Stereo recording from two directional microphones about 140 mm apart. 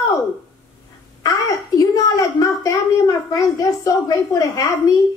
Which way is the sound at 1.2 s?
25° left (ahead or behind).